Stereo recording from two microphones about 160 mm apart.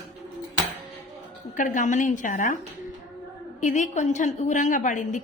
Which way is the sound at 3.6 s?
50° left (ahead or behind).